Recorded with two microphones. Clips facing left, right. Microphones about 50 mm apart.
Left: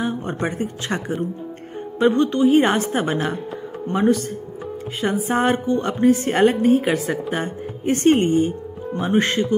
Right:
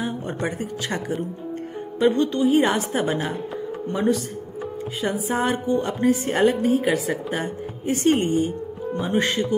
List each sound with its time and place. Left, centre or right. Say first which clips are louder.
0.6 s a woman's voice: left 2 dB; left
8.1 s a woman's voice: left 4 dB; left